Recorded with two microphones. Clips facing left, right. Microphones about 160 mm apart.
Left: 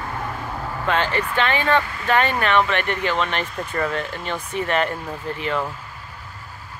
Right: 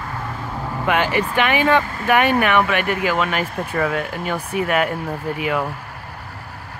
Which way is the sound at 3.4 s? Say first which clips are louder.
Right 4 dB; 55° right (ahead or behind).